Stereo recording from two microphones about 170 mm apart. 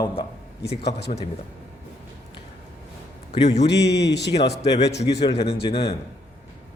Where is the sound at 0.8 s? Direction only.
80° left.